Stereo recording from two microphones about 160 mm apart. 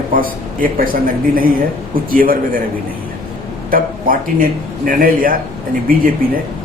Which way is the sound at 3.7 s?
60° right (ahead or behind).